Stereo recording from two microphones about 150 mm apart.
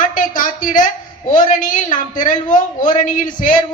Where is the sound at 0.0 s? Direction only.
65° left (ahead or behind).